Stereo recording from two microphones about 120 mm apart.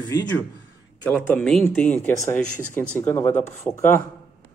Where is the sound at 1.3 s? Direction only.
10° left (ahead or behind).